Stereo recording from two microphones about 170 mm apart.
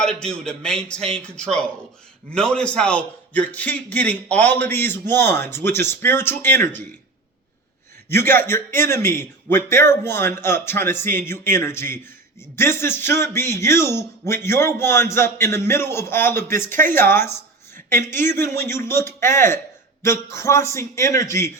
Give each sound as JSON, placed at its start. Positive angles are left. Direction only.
{"t": 0.0, "sound": "a man's voice", "side_deg": 5}
{"t": 8.1, "sound": "a man's voice", "side_deg": 15}